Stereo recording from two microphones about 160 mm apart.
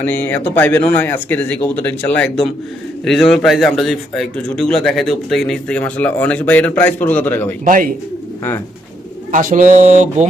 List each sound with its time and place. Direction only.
0.0 s a man's voice: 10° left (ahead or behind)
7.6 s speech: 60° right (ahead or behind)
9.3 s speech: 55° right (ahead or behind)